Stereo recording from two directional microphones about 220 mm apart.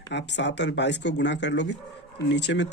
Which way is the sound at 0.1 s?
50° left (ahead or behind).